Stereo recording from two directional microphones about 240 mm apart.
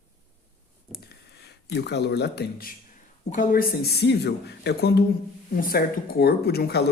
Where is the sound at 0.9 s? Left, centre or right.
Left.